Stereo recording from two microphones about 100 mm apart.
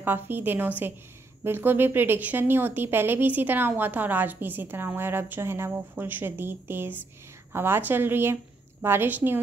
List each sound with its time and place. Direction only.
0.0 s a woman's voice: 20° right (ahead or behind)